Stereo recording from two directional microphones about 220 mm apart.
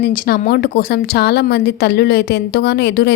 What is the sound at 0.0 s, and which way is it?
Speech, 40° left (ahead or behind).